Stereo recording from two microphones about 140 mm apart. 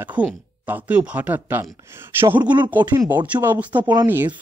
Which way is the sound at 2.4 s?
30° right (ahead or behind).